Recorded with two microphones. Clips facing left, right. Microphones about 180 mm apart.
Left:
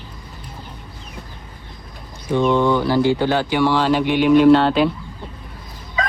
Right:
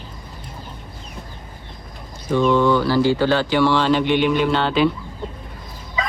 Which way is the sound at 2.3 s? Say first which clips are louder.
Even; 15° left (ahead or behind).